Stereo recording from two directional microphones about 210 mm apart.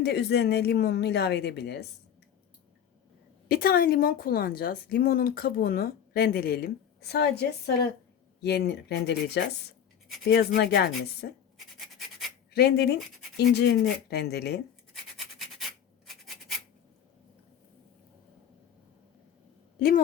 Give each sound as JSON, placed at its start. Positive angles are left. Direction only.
{"t": 0.0, "sound": "a woman's voice", "side_deg": 50}
{"t": 3.5, "sound": "a woman's voice", "side_deg": 45}
{"t": 12.5, "sound": "a woman's voice", "side_deg": 50}
{"t": 15.4, "sound": "rub", "side_deg": 0}